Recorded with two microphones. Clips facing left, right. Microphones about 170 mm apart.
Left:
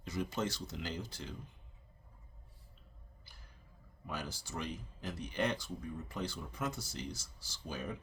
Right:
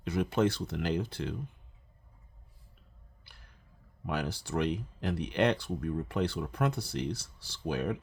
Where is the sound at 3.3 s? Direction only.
65° right (ahead or behind).